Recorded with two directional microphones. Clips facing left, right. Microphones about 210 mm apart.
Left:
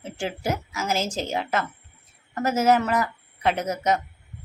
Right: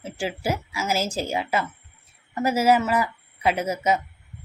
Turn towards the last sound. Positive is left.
turn(degrees=-10)  # may be behind; listen again after turning